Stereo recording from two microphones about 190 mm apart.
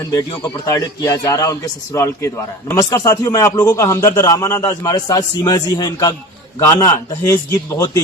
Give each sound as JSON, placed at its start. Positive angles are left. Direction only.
{"t": 0.1, "sound": "a man's voice", "side_deg": 20}